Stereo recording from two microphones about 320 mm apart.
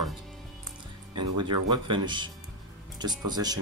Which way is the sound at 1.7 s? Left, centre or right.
Centre.